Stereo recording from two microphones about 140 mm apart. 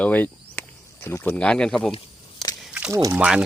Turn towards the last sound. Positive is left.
turn(degrees=-5)  # may be behind; listen again after turning